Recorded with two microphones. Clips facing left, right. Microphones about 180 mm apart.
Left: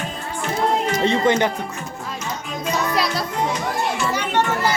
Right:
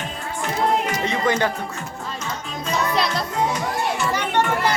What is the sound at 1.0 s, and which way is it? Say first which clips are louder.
Music: left 3 dB; 25° left (ahead or behind).